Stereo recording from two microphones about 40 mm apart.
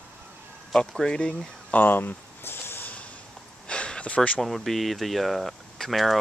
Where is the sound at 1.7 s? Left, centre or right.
Left.